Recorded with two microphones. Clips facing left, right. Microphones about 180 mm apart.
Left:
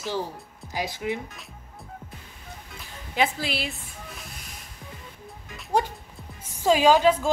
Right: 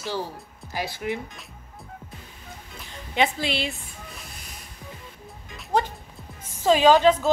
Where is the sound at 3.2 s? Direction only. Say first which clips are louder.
Right 2 dB; 5° left (ahead or behind).